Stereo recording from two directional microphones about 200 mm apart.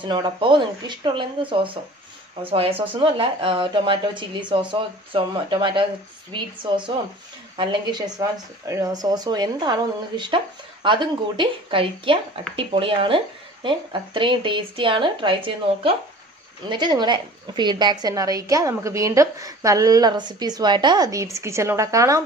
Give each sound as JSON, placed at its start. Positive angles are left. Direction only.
{"t": 0.0, "sound": "a woman's voice", "side_deg": -25}